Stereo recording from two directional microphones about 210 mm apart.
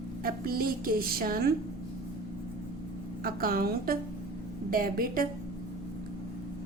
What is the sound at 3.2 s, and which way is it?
A woman's voice, 45° right (ahead or behind).